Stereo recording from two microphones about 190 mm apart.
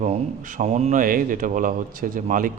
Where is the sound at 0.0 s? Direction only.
40° right (ahead or behind).